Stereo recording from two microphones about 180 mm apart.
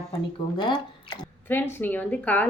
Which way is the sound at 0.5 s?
25° left (ahead or behind).